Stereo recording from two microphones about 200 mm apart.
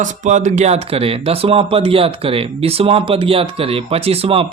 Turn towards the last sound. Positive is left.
turn(degrees=-30)  # may be behind; listen again after turning